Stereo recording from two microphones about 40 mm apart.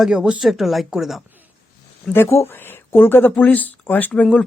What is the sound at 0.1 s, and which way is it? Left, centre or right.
Speech, right.